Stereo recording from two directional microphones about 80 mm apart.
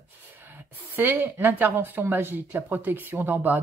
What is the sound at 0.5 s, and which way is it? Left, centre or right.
Speech, right.